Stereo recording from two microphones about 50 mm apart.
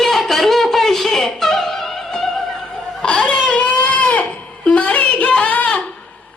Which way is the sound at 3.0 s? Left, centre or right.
Centre.